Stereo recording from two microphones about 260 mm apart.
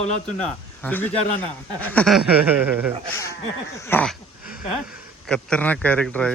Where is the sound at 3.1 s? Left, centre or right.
Centre.